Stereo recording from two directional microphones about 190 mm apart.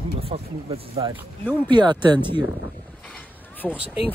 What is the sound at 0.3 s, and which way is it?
Speech, 25° right (ahead or behind).